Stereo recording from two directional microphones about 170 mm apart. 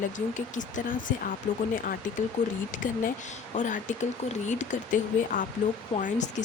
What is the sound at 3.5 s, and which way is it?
Speech, 45° left (ahead or behind).